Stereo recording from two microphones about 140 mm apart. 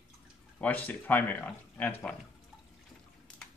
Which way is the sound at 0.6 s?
10° left (ahead or behind).